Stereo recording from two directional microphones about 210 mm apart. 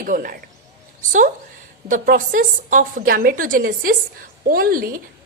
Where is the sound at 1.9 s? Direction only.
40° right (ahead or behind).